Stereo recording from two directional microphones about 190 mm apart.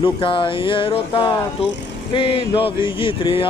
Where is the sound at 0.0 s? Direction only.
25° left (ahead or behind).